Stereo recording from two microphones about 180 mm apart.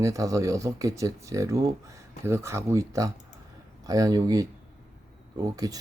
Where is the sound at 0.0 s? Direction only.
20° right (ahead or behind).